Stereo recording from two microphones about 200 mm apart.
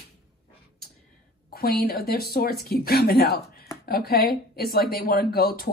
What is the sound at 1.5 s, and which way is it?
Speech, 50° left (ahead or behind).